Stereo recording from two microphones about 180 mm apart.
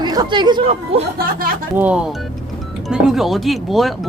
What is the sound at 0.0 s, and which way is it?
Speech, 25° right (ahead or behind).